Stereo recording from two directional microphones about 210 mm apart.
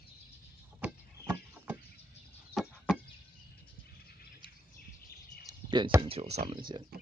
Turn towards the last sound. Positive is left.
turn(degrees=-30)  # may be behind; listen again after turning